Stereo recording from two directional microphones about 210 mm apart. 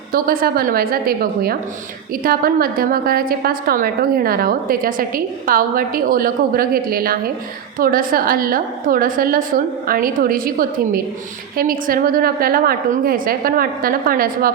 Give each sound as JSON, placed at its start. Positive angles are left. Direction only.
{"t": 0.1, "sound": "a woman's voice", "side_deg": -45}